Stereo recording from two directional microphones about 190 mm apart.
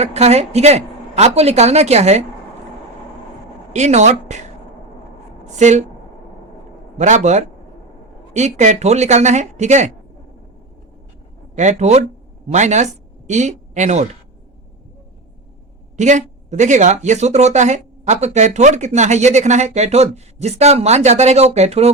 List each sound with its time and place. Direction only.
0.0 s speech: 35° right (ahead or behind)
3.7 s speech: 35° right (ahead or behind)
5.5 s speech: 40° right (ahead or behind)
7.0 s speech: 35° right (ahead or behind)
11.5 s speech: 35° right (ahead or behind)
16.0 s speech: 40° right (ahead or behind)